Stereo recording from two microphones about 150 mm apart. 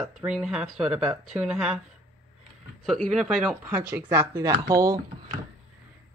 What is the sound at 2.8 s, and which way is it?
Speech, centre (ahead or behind).